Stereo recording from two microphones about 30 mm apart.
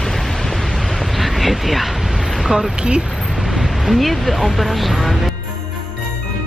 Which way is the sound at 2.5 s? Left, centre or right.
Right.